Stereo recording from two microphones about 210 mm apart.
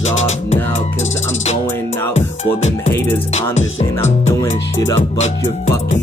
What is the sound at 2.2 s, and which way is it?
Music, 30° left (ahead or behind).